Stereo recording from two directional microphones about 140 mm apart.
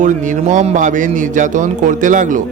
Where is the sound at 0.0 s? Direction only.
65° right (ahead or behind).